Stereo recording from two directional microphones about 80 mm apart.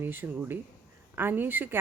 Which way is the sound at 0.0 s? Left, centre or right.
Right.